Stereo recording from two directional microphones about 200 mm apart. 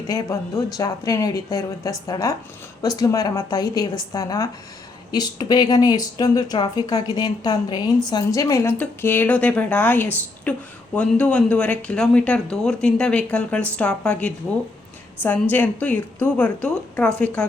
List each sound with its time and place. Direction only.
0.1 s a woman's voice: 15° left (ahead or behind)